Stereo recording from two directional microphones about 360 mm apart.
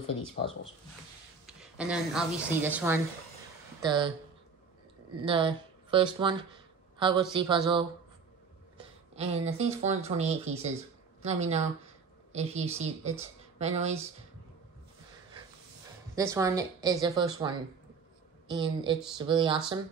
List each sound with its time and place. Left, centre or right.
1.4 s a woman's voice: centre
5.1 s a woman's voice: centre
8.7 s a woman's voice: centre
16.2 s a woman's voice: centre
18.5 s a woman's voice: centre